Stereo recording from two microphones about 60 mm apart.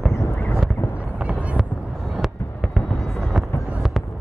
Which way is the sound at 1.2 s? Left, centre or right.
Centre.